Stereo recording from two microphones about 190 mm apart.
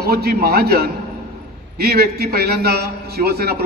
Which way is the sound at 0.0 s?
55° right (ahead or behind).